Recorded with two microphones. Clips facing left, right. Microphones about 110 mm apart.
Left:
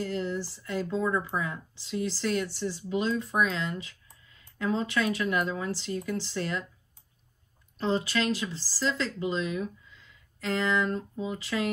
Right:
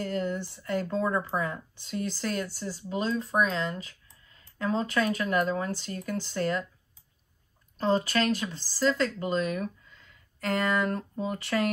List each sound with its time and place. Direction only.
0.0 s speech: 55° right (ahead or behind)
7.7 s speech: 45° right (ahead or behind); by 11.7 s 65° right (ahead or behind)